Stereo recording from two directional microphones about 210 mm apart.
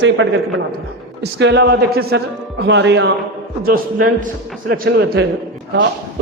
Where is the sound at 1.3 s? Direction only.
55° right (ahead or behind).